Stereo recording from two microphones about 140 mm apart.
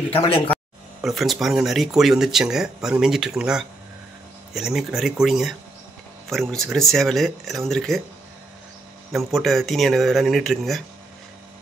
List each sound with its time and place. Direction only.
0.1 s speech: 40° left (ahead or behind)
1.0 s speech: centre (ahead or behind)
9.1 s speech: centre (ahead or behind)